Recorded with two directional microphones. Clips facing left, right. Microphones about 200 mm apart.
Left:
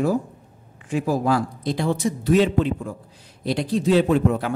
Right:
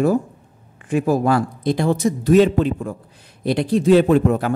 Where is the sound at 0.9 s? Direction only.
55° right (ahead or behind).